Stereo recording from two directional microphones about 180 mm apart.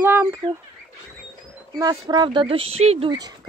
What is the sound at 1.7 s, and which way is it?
Speech, 20° right (ahead or behind).